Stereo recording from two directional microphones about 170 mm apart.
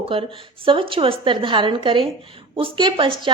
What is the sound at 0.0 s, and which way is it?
A woman's voice, 35° right (ahead or behind).